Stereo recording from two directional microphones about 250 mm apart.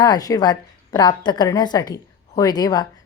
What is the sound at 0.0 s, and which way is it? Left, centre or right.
A woman's voice, centre.